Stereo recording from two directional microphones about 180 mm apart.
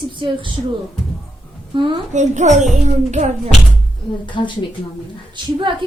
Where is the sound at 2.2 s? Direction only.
40° right (ahead or behind).